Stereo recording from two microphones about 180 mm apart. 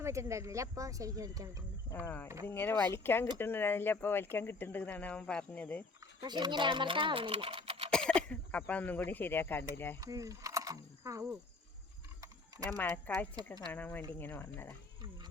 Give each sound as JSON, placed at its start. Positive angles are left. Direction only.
{"t": 0.0, "sound": "speech", "side_deg": -15}
{"t": 1.9, "sound": "speech", "side_deg": 10}
{"t": 2.2, "sound": "speech", "side_deg": -15}
{"t": 2.5, "sound": "speech", "side_deg": 10}
{"t": 6.1, "sound": "speech", "side_deg": -25}
{"t": 7.9, "sound": "speech", "side_deg": 5}
{"t": 10.0, "sound": "speech", "side_deg": -20}
{"t": 12.2, "sound": "clip-clop", "side_deg": -20}
{"t": 12.7, "sound": "speech", "side_deg": 10}